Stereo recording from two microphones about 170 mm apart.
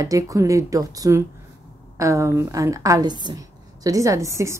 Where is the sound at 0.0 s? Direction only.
20° right (ahead or behind).